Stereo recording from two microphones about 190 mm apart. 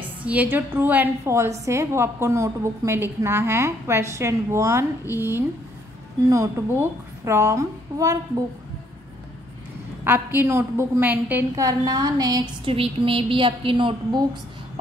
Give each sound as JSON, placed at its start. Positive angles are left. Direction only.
{"t": 0.2, "sound": "a woman's voice", "side_deg": -10}
{"t": 10.0, "sound": "a woman's voice", "side_deg": -10}